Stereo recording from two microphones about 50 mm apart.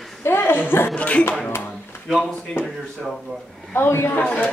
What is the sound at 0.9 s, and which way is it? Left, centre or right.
Speech, left.